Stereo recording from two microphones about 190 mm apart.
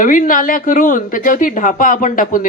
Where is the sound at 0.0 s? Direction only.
45° left (ahead or behind).